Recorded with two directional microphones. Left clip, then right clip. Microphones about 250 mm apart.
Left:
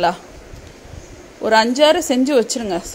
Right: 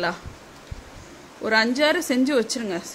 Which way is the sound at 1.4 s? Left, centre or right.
Centre.